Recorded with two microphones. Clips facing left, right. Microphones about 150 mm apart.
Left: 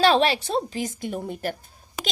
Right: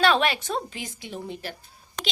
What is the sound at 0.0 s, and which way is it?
A woman's voice, 35° left (ahead or behind).